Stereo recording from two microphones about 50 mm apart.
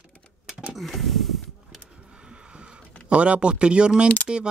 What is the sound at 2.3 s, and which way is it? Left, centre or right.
Vehicle, centre.